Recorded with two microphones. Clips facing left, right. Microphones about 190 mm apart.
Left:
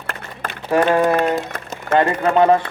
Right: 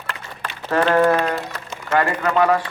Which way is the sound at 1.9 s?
25° left (ahead or behind).